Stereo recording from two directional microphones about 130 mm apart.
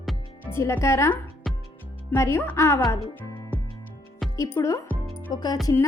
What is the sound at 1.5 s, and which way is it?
Music, centre (ahead or behind).